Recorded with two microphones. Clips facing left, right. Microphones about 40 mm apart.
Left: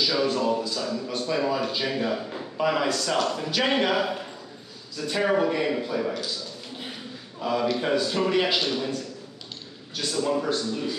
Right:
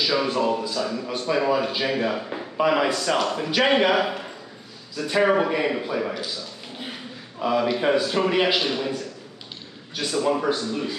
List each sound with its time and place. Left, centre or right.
0.0 s speech: right
7.3 s speech: centre